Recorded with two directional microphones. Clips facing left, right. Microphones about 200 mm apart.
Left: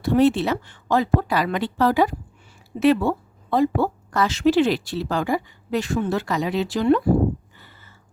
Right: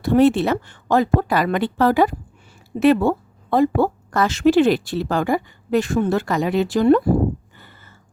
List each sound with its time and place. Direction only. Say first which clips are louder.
0.0 s speech: right 3 dB; 55° right (ahead or behind)